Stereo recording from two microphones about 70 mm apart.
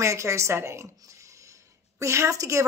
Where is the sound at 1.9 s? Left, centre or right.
Right.